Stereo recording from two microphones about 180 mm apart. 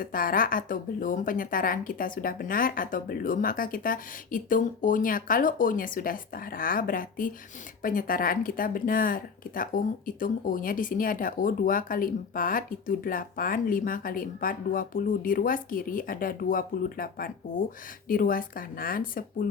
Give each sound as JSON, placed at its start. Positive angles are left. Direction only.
{"t": 0.0, "sound": "speech", "side_deg": 50}